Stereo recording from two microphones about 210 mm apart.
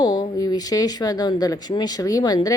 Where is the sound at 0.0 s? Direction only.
20° left (ahead or behind).